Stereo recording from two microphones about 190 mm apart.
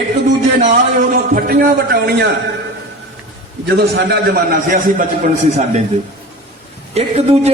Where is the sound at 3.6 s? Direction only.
60° right (ahead or behind); by 5.8 s 40° right (ahead or behind).